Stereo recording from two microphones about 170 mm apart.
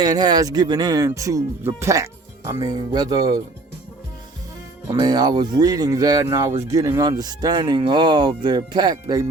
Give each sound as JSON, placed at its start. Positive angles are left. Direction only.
{"t": 0.0, "sound": "speech", "side_deg": -25}
{"t": 4.9, "sound": "speech", "side_deg": -25}